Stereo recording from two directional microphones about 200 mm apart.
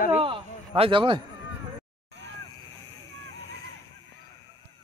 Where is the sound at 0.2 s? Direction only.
25° right (ahead or behind).